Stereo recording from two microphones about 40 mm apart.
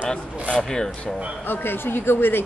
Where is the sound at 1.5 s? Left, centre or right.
Left.